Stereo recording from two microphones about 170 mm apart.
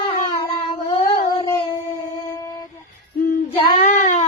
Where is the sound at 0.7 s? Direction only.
30° left (ahead or behind).